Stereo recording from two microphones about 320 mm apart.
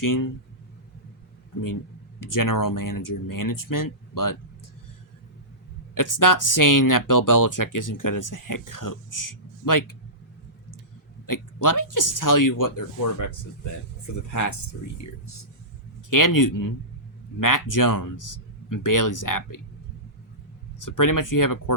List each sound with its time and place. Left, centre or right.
0.0 s speech: left
2.2 s speech: left
5.9 s speech: left
11.3 s speech: left
16.0 s speech: left
20.8 s speech: left